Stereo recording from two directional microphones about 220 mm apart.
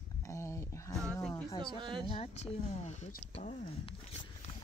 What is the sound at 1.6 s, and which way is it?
Speech, 20° right (ahead or behind).